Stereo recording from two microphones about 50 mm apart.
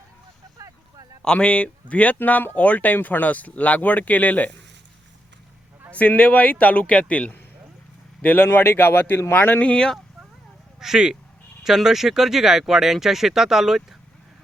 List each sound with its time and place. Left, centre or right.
1.2 s a man's voice: centre
5.9 s a man's voice: left
8.4 s speech: left
9.6 s a man's voice: left
10.8 s speech: centre